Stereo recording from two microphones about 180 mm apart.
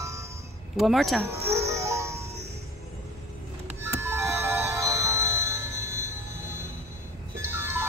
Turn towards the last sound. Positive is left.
turn(degrees=-15)  # may be behind; listen again after turning